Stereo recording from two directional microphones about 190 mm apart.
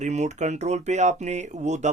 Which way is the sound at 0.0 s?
35° right (ahead or behind).